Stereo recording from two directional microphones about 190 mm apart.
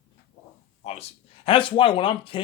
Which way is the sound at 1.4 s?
25° left (ahead or behind).